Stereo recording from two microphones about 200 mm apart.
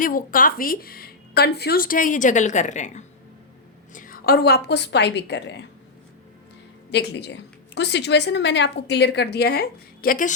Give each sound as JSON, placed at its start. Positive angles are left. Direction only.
{"t": 0.0, "sound": "a woman's voice", "side_deg": 45}
{"t": 6.9, "sound": "a woman's voice", "side_deg": 60}